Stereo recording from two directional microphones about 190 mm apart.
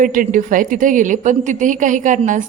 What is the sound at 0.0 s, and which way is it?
A woman's voice, 45° right (ahead or behind).